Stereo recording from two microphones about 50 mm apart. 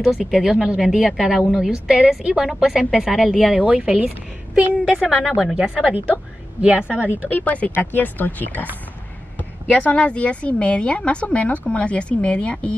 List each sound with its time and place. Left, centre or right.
0.0 s a woman's voice: centre
3.5 s a woman's voice: right
5.1 s a woman's voice: centre
6.6 s a woman's voice: right
7.7 s speech: left
9.8 s a woman's voice: left